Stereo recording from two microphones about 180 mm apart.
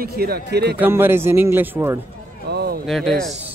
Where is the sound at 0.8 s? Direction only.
10° right (ahead or behind).